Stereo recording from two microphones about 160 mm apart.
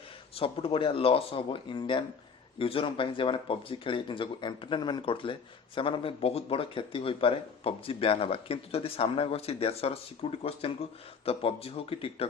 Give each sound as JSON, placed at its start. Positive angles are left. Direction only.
{"t": 0.3, "sound": "speech", "side_deg": 35}